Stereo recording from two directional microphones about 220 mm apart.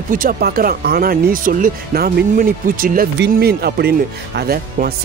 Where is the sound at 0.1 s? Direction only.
40° right (ahead or behind).